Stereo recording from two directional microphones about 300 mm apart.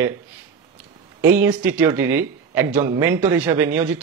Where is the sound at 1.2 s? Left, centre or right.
Centre.